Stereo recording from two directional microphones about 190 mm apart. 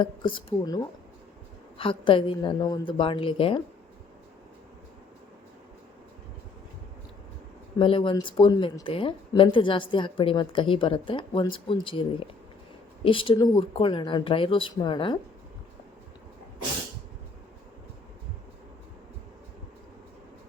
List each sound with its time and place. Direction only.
0.0 s speech: 25° left (ahead or behind)
7.8 s speech: 25° left (ahead or behind)